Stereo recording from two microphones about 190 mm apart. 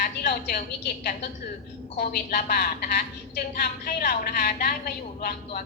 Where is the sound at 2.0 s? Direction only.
50° left (ahead or behind).